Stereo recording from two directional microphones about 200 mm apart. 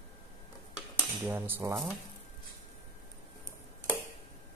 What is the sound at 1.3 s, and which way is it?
Speech, 10° right (ahead or behind).